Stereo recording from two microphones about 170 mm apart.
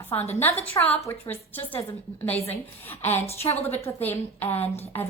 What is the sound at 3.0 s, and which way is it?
Speech, 40° left (ahead or behind).